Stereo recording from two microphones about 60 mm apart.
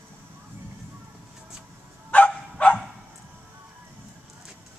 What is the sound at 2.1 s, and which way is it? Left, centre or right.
Dog, left.